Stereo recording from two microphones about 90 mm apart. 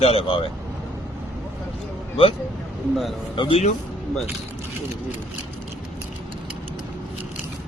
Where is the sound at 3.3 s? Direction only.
70° left (ahead or behind).